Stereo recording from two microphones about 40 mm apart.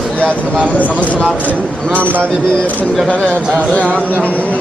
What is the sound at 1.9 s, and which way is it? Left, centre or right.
Speech, right.